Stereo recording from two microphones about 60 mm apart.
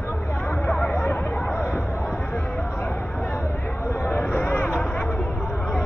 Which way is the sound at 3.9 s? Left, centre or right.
Left.